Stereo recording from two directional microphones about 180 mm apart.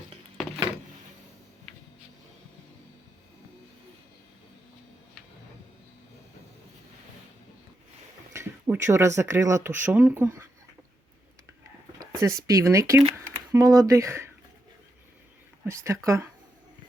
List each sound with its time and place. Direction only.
8.3 s speech: 15° right (ahead or behind)
12.2 s speech: 20° right (ahead or behind)
15.6 s speech: 15° right (ahead or behind)